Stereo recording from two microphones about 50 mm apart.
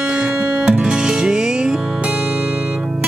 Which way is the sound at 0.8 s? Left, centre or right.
Centre.